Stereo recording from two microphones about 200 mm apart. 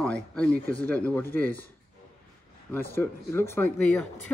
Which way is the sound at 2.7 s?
10° left (ahead or behind).